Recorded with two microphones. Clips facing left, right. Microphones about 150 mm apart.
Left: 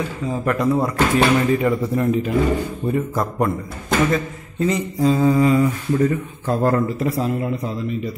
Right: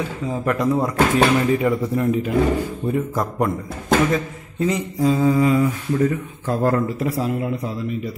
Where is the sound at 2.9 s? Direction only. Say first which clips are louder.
Left 1 dB; 15° right (ahead or behind).